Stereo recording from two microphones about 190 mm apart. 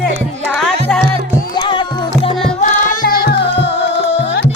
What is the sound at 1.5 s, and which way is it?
Music, 25° left (ahead or behind).